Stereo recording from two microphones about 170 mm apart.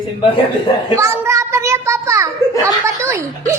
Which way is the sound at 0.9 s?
15° right (ahead or behind).